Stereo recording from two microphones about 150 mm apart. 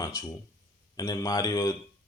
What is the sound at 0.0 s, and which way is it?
Speech, 25° left (ahead or behind).